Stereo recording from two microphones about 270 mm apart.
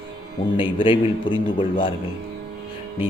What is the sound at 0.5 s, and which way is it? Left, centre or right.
Speech, centre.